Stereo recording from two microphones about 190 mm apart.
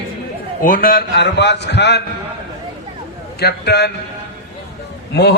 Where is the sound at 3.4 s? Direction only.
60° left (ahead or behind).